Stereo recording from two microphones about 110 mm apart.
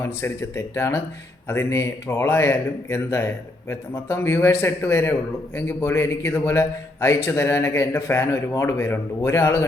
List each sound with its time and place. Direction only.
0.0 s a man's voice: 25° left (ahead or behind)